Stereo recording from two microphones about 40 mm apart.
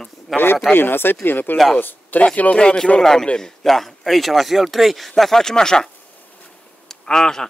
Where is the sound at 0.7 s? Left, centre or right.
Left.